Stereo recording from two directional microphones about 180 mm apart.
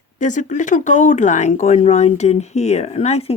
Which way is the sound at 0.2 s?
45° left (ahead or behind).